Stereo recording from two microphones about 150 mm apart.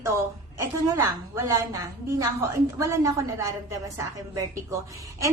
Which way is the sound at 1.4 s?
20° right (ahead or behind).